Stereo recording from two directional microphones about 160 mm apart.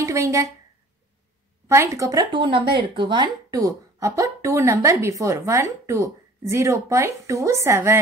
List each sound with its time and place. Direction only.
0.0 s a woman's voice: 20° right (ahead or behind)
1.7 s speech: 20° right (ahead or behind)